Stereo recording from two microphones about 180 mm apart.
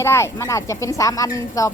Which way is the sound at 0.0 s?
15° left (ahead or behind).